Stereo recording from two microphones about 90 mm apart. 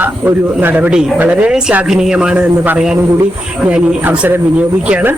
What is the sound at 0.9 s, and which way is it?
A man's voice, 5° right (ahead or behind).